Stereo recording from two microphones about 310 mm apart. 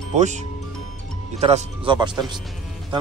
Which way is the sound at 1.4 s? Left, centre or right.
Centre.